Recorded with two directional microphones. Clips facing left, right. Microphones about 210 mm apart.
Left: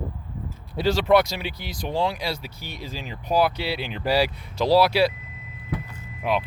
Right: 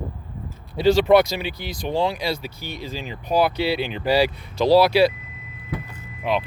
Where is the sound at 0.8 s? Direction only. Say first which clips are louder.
Right 4 dB; centre (ahead or behind).